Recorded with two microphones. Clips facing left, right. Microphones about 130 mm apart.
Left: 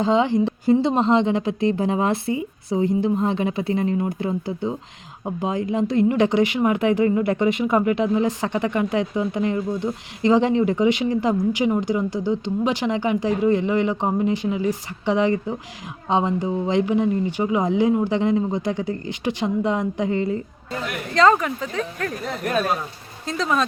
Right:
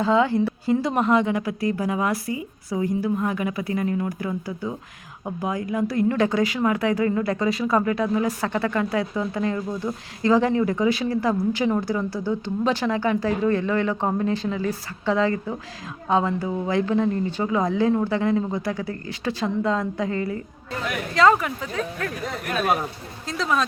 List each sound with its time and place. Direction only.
0.0 s speech: 20° left (ahead or behind)
21.1 s speech: 5° right (ahead or behind)
23.2 s speech: centre (ahead or behind)